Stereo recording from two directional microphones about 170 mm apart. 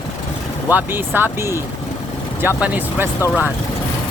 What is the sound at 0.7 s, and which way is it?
Speech, 10° right (ahead or behind).